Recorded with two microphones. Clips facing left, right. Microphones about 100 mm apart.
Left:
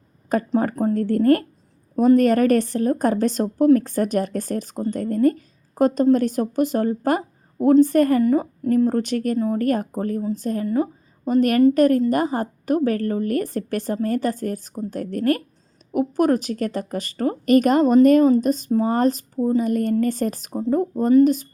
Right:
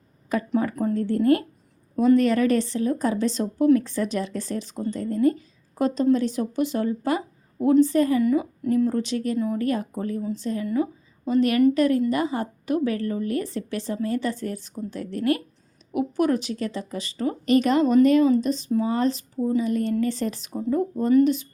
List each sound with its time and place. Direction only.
0.3 s speech: 45° left (ahead or behind)
0.9 s speech: 50° left (ahead or behind)
8.2 s speech: 40° left (ahead or behind)
8.9 s speech: 50° left (ahead or behind)
20.5 s speech: 30° left (ahead or behind)
20.9 s speech: 50° left (ahead or behind)